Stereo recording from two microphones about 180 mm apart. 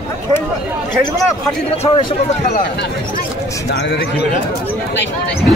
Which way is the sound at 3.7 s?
70° left (ahead or behind).